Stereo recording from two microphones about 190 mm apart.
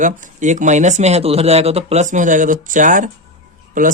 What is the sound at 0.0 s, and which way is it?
Speech, 40° right (ahead or behind).